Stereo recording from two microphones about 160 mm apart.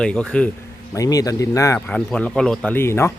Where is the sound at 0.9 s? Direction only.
20° left (ahead or behind).